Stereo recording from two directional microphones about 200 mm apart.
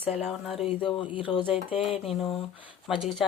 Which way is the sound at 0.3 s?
Centre (ahead or behind).